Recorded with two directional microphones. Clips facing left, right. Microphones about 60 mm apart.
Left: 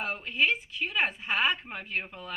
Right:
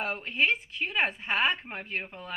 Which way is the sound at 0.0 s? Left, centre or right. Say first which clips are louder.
Even; right.